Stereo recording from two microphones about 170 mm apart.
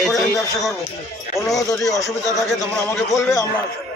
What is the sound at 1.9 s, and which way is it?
Speech, 20° left (ahead or behind).